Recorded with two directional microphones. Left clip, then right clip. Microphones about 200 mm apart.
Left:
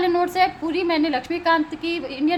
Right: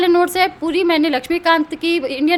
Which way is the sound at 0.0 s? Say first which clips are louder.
Right 5 dB; 35° right (ahead or behind).